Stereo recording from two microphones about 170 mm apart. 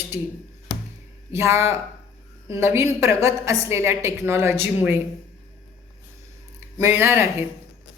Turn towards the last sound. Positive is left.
turn(degrees=-15)  # may be behind; listen again after turning